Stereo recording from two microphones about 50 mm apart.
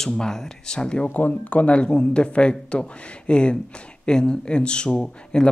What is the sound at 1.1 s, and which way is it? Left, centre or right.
Speech, left.